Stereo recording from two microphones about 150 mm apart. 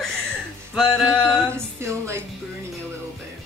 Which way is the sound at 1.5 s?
20° right (ahead or behind).